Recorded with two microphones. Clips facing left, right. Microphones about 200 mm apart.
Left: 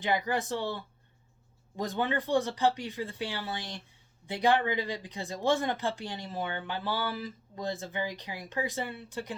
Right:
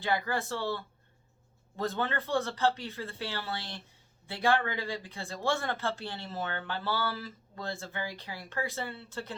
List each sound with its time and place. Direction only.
0.0 s speech: 15° left (ahead or behind)